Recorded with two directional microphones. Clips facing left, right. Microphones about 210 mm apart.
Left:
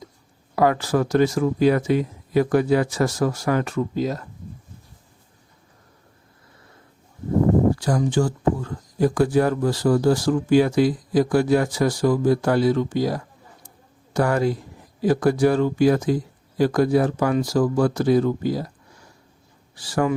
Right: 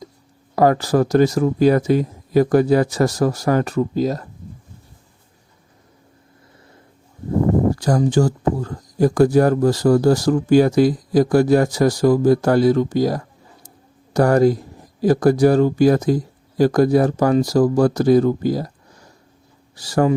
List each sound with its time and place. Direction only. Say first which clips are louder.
0.5 s speech: right 4 dB; 40° right (ahead or behind)
7.8 s speech: right 4 dB; 40° right (ahead or behind)